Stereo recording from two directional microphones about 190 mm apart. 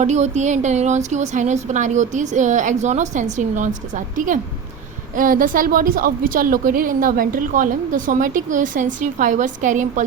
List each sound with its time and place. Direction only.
0.0 s a woman's voice: 40° right (ahead or behind)